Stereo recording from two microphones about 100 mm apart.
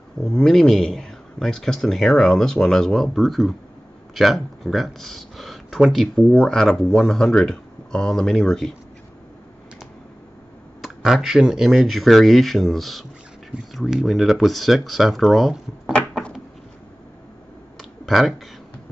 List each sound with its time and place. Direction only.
0.2 s speech: 5° left (ahead or behind)
10.8 s speech: centre (ahead or behind)
17.7 s clicking: centre (ahead or behind)